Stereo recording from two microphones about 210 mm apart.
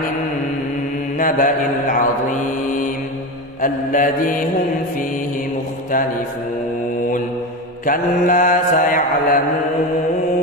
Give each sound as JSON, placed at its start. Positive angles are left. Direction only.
{"t": 1.1, "sound": "mantra", "side_deg": 40}
{"t": 7.8, "sound": "mantra", "side_deg": 40}